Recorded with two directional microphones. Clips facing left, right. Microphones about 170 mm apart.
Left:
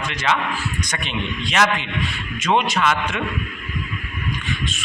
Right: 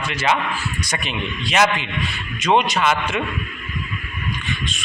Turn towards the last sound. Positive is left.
turn(degrees=0)  # may be behind; listen again after turning